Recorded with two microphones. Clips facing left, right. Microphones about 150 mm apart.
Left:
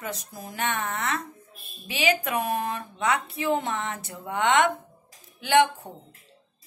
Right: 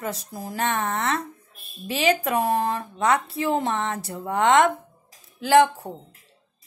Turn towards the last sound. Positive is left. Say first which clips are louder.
# right 4 dB
turn(degrees=-35)  # may be behind; listen again after turning